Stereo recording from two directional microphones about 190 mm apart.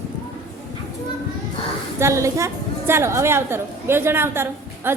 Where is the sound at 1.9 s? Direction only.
15° right (ahead or behind).